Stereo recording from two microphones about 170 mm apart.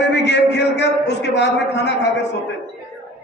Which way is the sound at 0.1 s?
85° left.